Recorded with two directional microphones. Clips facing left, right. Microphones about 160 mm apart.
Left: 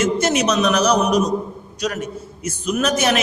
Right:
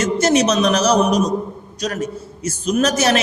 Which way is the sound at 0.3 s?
30° right (ahead or behind).